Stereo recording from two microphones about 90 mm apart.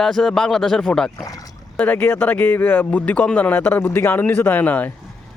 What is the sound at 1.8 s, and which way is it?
Speech, 20° left (ahead or behind).